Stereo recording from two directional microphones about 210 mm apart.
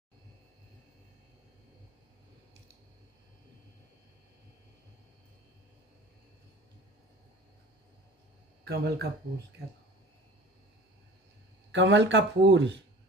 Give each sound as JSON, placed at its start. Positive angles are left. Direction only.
{"t": 8.6, "sound": "speech", "side_deg": -50}
{"t": 11.7, "sound": "speech", "side_deg": -60}